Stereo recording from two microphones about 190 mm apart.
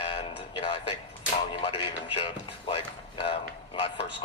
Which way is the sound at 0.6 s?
25° left (ahead or behind).